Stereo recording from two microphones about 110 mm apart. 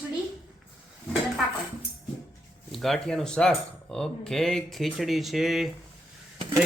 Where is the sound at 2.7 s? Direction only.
Centre (ahead or behind).